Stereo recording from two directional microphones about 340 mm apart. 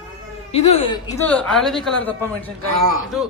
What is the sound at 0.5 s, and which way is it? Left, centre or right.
Speech, centre.